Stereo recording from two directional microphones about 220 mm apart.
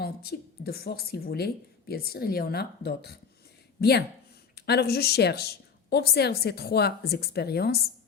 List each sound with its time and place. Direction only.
0.0 s a woman's voice: 45° left (ahead or behind)